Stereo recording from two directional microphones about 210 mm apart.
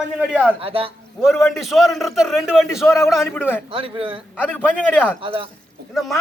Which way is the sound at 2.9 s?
15° left (ahead or behind).